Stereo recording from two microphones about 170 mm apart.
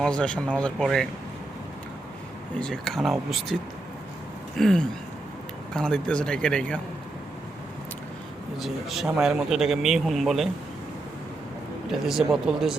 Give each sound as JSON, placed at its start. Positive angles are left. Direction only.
{"t": 0.0, "sound": "speech", "side_deg": 5}
{"t": 2.6, "sound": "a man's voice", "side_deg": 5}
{"t": 8.5, "sound": "a man's voice", "side_deg": 0}
{"t": 11.9, "sound": "a man's voice", "side_deg": 0}